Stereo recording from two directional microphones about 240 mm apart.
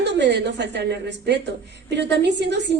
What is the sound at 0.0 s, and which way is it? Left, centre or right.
A woman's voice, right.